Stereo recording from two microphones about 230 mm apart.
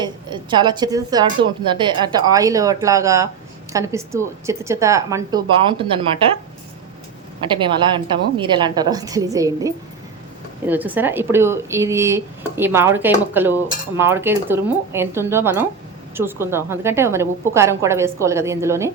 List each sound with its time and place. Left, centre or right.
0.0 s speech: centre
7.6 s speech: right